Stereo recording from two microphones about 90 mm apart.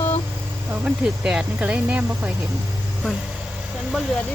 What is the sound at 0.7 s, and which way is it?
Speech, 15° right (ahead or behind).